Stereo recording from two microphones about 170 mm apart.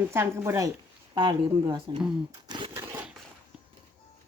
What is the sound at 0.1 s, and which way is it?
Speech, 15° right (ahead or behind).